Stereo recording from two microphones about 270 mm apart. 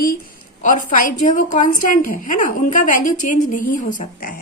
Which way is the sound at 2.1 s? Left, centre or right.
Left.